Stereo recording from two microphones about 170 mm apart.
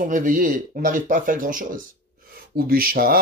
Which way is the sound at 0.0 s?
50° right (ahead or behind).